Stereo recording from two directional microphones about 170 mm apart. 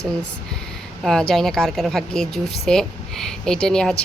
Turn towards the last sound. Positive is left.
turn(degrees=5)  # may be behind; listen again after turning